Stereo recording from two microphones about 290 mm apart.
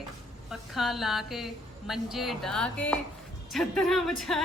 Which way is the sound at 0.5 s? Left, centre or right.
Centre.